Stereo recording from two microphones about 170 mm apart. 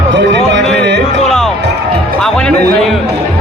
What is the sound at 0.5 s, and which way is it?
Music, 90° right.